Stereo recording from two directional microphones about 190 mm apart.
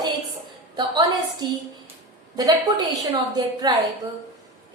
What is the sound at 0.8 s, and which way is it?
A woman's voice, 25° right (ahead or behind).